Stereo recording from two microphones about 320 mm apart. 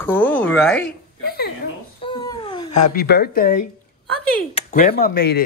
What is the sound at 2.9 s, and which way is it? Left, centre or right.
A woman's voice, left.